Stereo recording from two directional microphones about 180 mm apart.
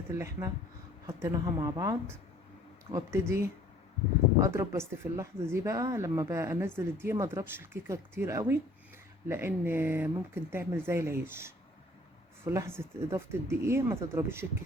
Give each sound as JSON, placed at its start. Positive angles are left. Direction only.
{"t": 0.1, "sound": "a woman's voice", "side_deg": -15}